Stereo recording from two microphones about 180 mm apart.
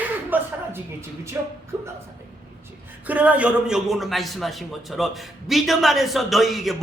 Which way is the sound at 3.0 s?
10° right (ahead or behind).